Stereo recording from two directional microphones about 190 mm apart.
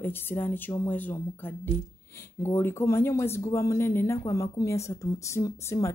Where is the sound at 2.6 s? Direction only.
10° left (ahead or behind).